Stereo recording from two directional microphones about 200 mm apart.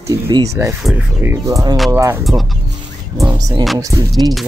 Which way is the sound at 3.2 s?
15° right (ahead or behind).